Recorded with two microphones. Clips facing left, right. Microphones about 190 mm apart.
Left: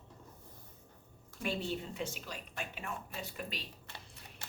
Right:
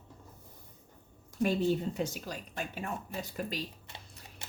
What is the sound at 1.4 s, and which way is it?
Speech, 40° right (ahead or behind).